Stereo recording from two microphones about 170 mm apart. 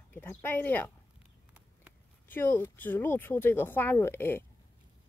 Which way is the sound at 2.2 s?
10° left (ahead or behind).